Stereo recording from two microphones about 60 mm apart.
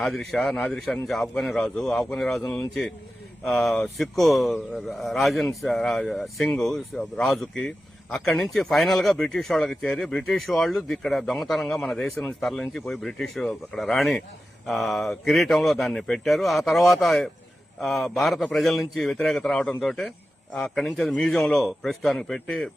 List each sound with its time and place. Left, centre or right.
0.0 s speech: centre
3.4 s speech: centre